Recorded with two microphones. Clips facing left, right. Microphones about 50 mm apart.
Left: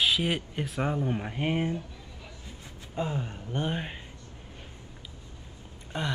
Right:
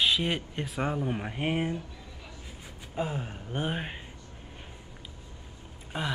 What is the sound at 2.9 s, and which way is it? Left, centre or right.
Speech, centre.